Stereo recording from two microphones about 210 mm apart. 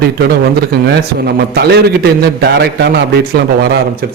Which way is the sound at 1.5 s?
50° right (ahead or behind).